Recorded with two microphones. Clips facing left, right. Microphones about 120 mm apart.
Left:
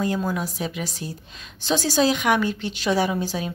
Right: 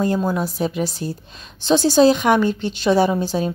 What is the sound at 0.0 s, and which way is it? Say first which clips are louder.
A woman's voice: right 5 dB; 35° right (ahead or behind).